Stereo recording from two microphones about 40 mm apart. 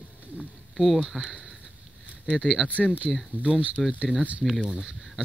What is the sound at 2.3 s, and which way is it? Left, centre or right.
Speech, centre.